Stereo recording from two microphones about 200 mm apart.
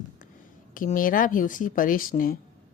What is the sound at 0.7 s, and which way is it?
Speech, 40° left (ahead or behind).